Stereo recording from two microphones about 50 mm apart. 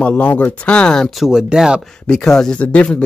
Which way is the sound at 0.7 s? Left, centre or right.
Centre.